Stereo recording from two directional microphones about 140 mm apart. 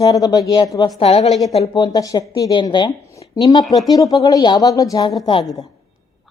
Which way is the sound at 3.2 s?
40° left (ahead or behind).